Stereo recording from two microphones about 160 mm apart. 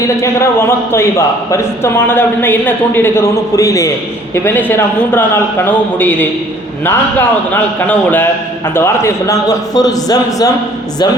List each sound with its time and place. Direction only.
0.0 s a man's voice: 15° left (ahead or behind)